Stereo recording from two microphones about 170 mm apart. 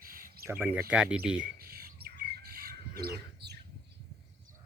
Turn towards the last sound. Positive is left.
turn(degrees=-75)  # may be behind; listen again after turning